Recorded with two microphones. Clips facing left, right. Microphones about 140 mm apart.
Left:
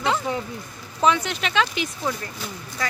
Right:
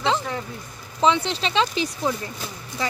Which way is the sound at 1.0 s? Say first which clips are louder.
Right 1 dB; 25° right (ahead or behind).